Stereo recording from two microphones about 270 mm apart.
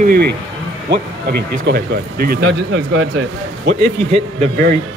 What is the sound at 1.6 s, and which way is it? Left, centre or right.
Speech, right.